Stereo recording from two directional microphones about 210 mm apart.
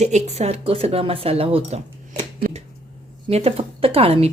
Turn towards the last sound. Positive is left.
turn(degrees=-30)  # may be behind; listen again after turning